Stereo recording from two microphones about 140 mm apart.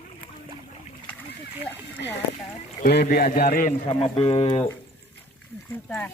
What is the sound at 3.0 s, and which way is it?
Speech, 85° left.